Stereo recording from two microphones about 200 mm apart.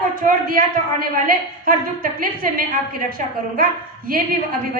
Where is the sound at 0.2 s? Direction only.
45° right (ahead or behind).